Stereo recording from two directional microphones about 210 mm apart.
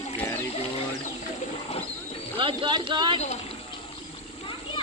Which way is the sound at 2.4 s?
25° right (ahead or behind).